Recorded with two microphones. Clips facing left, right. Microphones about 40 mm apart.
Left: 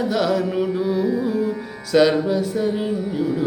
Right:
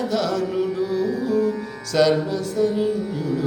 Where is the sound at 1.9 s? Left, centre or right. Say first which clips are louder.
Left 2 dB; centre.